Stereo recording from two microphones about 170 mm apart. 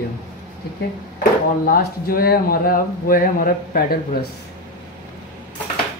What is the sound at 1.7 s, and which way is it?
Speech, 60° left (ahead or behind).